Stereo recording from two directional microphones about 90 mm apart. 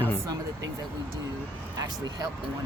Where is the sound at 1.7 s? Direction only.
45° right (ahead or behind).